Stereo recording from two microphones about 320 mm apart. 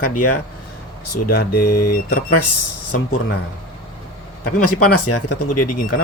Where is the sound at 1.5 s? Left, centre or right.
Left.